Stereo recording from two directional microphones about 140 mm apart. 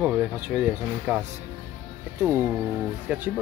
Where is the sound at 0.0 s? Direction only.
10° right (ahead or behind).